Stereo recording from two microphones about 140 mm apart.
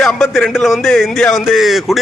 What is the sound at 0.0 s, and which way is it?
A man's voice, centre (ahead or behind).